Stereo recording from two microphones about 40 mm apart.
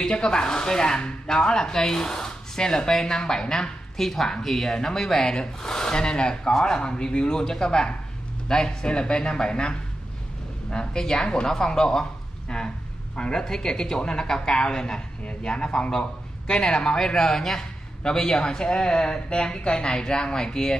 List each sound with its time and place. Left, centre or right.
0.1 s a man's voice: left